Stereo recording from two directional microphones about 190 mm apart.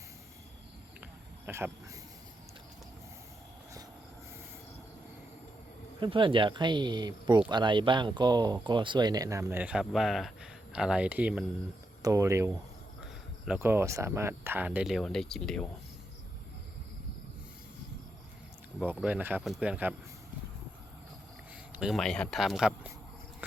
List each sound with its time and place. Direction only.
1.5 s speech: 15° right (ahead or behind)
6.0 s speech: 25° right (ahead or behind); by 15.6 s centre (ahead or behind)
19.0 s speech: 10° right (ahead or behind)
21.7 s speech: 5° right (ahead or behind)
23.4 s a sound: 10° right (ahead or behind)